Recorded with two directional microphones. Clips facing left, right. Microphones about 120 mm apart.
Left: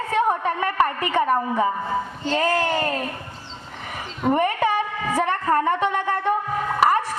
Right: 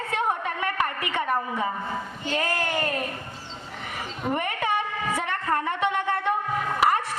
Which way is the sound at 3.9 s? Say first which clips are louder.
Left 7 dB; 35° left (ahead or behind).